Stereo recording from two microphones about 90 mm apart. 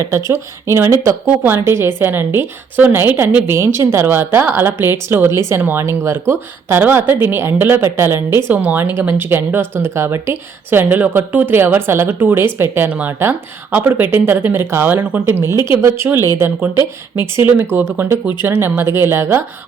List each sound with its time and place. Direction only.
0.0 s a woman's voice: 35° right (ahead or behind)
17.3 s a woman's voice: 25° right (ahead or behind)